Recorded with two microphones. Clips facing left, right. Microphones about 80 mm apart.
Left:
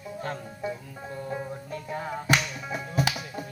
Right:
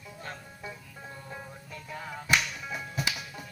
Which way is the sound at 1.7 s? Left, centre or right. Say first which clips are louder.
Left 6 dB; left.